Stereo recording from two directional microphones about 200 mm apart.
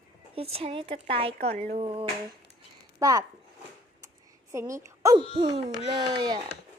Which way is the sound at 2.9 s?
15° right (ahead or behind).